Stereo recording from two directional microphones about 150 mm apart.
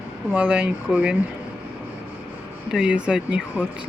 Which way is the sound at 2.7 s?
5° right (ahead or behind).